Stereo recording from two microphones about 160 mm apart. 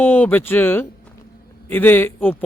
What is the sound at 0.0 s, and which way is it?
Speech, 10° left (ahead or behind).